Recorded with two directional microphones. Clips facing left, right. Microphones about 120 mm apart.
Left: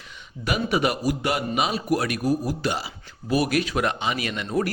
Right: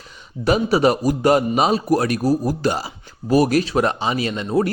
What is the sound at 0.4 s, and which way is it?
A man's voice, 35° right (ahead or behind).